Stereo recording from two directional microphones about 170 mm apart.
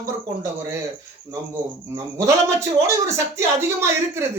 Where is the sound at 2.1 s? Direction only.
15° right (ahead or behind).